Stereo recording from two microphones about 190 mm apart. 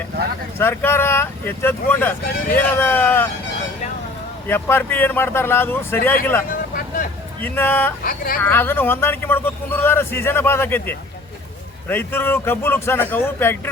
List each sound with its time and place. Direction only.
0.6 s speech: 10° left (ahead or behind)
4.4 s speech: 10° left (ahead or behind)
6.7 s vehicle: 45° left (ahead or behind)
7.4 s speech: 10° left (ahead or behind)
8.0 s speech: 50° left (ahead or behind)
8.4 s speech: 10° left (ahead or behind)